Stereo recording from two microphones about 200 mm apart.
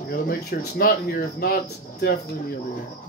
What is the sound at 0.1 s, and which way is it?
Speech, 50° left (ahead or behind).